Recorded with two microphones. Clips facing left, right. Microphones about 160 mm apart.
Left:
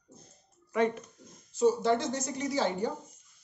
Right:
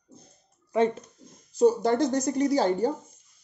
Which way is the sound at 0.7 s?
30° right (ahead or behind).